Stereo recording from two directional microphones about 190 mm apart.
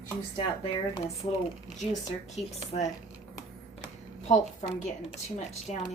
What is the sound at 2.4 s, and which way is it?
Speech, 35° left (ahead or behind).